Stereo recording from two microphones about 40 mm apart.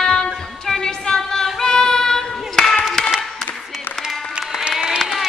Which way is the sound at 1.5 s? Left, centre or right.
Centre.